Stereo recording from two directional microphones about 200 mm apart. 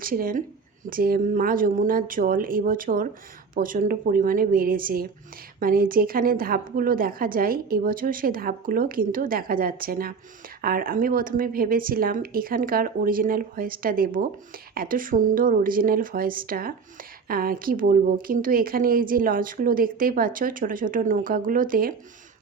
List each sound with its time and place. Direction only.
0.0 s a woman's voice: 45° right (ahead or behind)